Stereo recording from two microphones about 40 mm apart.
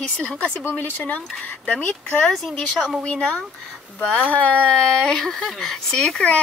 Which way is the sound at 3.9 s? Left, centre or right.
Left.